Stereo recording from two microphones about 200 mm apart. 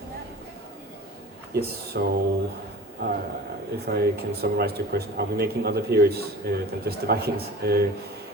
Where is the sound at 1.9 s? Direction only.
50° right (ahead or behind).